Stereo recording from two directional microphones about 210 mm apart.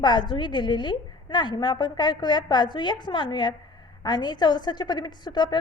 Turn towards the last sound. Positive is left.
turn(degrees=20)  # may be behind; listen again after turning